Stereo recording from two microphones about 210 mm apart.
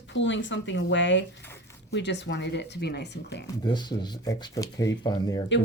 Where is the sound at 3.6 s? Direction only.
20° left (ahead or behind).